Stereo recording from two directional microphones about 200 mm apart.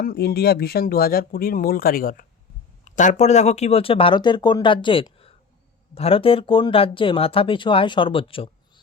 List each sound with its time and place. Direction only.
0.0 s speech: 50° left (ahead or behind); by 8.4 s 25° left (ahead or behind)